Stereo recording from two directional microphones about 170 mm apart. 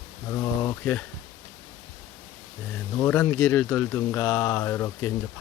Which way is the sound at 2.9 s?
10° left (ahead or behind).